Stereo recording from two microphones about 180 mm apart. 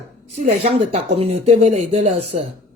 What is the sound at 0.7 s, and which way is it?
Speech, 35° right (ahead or behind).